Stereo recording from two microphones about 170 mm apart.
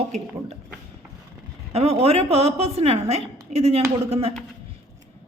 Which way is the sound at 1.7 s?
35° right (ahead or behind).